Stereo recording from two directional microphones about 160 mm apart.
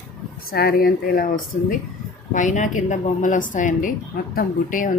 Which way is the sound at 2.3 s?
50° left (ahead or behind).